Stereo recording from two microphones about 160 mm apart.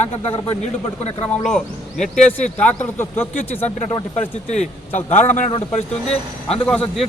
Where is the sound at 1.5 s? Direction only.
Centre (ahead or behind).